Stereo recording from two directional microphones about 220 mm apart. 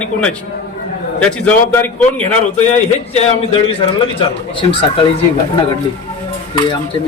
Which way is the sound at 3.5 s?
25° left (ahead or behind).